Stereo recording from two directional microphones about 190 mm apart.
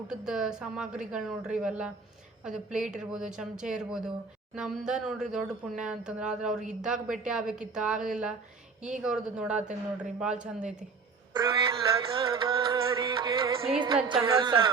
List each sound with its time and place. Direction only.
0.1 s a woman's voice: 5° right (ahead or behind)
11.3 s music: 25° right (ahead or behind)